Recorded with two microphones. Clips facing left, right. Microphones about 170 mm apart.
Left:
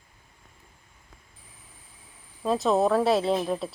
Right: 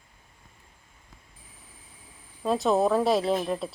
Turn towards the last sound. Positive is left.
turn(degrees=0)  # may be behind; listen again after turning